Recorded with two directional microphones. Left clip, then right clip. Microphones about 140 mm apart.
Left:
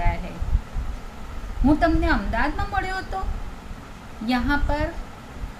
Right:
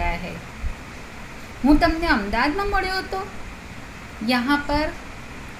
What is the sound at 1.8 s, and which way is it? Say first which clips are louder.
Speech: right 2 dB; 50° right (ahead or behind).